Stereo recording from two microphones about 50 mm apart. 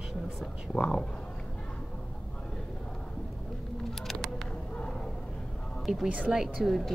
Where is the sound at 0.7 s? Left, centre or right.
Centre.